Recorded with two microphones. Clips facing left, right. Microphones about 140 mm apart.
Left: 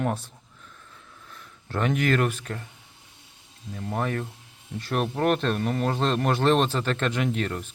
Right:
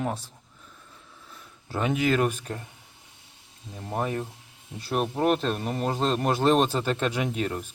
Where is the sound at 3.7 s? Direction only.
15° right (ahead or behind).